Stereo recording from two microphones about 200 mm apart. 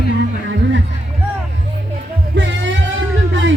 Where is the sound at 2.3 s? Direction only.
60° right (ahead or behind).